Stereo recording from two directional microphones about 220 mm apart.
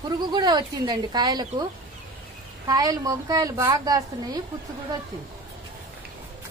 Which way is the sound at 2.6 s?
15° right (ahead or behind).